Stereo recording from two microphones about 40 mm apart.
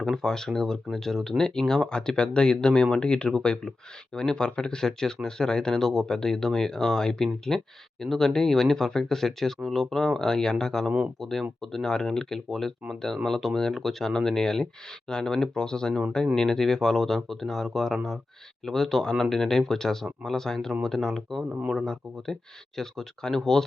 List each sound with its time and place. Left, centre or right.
0.2 s speech: centre